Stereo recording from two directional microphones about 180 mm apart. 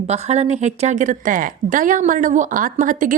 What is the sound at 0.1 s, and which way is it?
A woman's voice, 40° right (ahead or behind).